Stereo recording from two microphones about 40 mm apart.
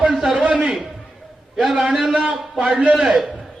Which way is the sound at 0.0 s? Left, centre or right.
Centre.